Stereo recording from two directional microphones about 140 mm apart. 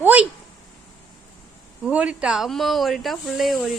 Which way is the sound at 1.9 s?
10° right (ahead or behind).